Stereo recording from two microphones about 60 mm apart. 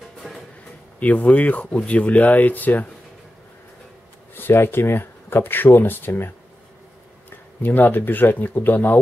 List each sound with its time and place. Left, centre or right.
0.2 s music: centre
0.9 s speech: left
4.4 s speech: left